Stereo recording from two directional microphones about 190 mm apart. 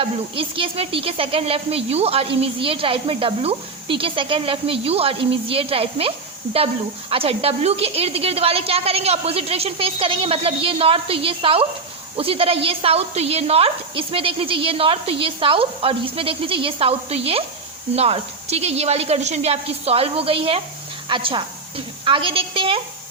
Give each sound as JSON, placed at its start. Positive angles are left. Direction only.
{"t": 0.0, "sound": "a woman's voice", "side_deg": -30}